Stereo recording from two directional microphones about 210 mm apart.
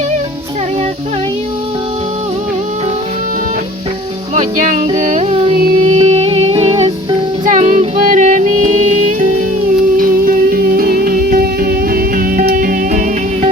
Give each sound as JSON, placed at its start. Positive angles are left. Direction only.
{"t": 4.4, "sound": "music", "side_deg": -40}